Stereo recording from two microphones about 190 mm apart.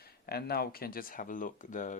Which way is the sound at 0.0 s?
55° left (ahead or behind).